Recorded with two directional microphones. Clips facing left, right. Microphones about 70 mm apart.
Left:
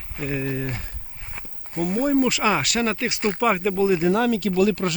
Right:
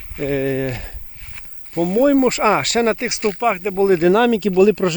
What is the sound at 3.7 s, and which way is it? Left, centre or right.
Speech, right.